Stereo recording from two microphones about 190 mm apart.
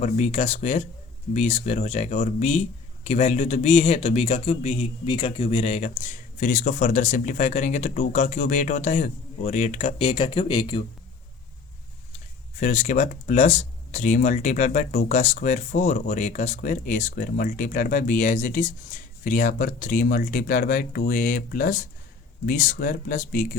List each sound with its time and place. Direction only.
0.0 s speech: 35° left (ahead or behind)
12.5 s speech: 40° left (ahead or behind)